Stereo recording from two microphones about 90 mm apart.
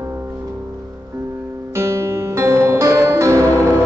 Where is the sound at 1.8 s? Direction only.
30° right (ahead or behind).